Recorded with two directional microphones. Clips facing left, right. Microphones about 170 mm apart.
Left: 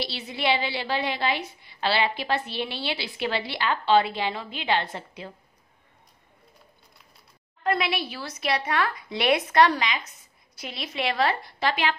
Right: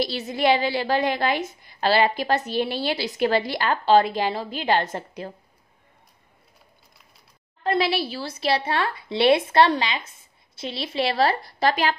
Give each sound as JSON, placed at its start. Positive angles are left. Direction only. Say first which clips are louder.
{"t": 0.0, "sound": "a woman's voice", "louder": "right 6 dB", "side_deg": -45}
{"t": 7.6, "sound": "a woman's voice", "louder": "right 3 dB", "side_deg": -30}